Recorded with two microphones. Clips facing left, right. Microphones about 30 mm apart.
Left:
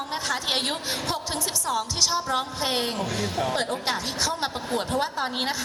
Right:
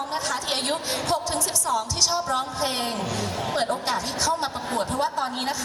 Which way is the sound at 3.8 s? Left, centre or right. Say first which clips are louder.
Right 2 dB; centre.